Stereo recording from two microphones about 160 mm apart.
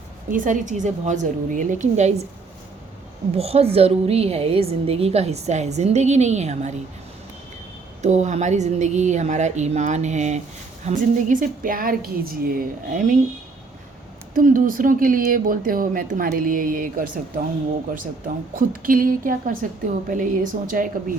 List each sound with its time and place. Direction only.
0.3 s speech: 55° right (ahead or behind)
3.3 s a woman's voice: 40° right (ahead or behind)
8.0 s speech: 45° right (ahead or behind)
14.3 s speech: 55° right (ahead or behind)
18.5 s speech: 60° right (ahead or behind)